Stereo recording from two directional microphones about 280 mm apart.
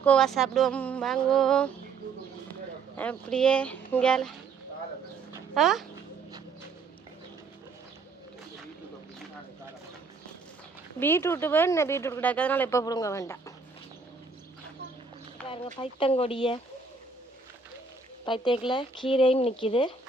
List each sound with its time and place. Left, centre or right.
0.0 s a sound: centre
3.0 s a sound: centre
5.3 s dog: centre
11.0 s speech: centre
15.4 s speech: centre
18.3 s speech: centre